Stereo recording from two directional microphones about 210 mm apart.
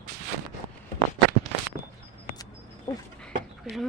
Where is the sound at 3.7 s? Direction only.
Centre (ahead or behind).